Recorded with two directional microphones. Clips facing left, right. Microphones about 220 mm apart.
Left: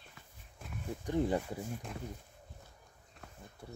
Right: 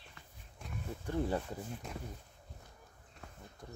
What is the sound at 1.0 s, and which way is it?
Speech, 15° left (ahead or behind).